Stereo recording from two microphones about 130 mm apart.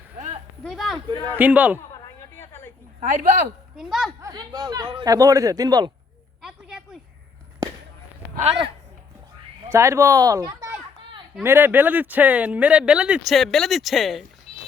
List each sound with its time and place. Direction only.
0.2 s a sound: 60° right (ahead or behind)
0.6 s speech: centre (ahead or behind)
0.9 s a man's voice: 35° right (ahead or behind)
1.4 s speech: 10° right (ahead or behind)
2.4 s a sound: 15° left (ahead or behind)
3.1 s speech: 85° right
3.8 s speech: centre (ahead or behind)
4.2 s speech: 30° right (ahead or behind)
6.4 s a sound: 5° right (ahead or behind)
7.6 s a sound: 30° right (ahead or behind)
9.6 s speech: 20° right (ahead or behind)
11.4 s speech: 15° right (ahead or behind); by 14.3 s centre (ahead or behind)